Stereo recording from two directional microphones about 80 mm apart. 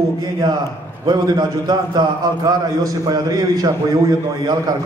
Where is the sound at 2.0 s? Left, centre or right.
Right.